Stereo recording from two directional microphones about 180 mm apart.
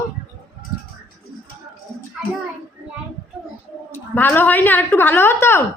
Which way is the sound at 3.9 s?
10° left (ahead or behind).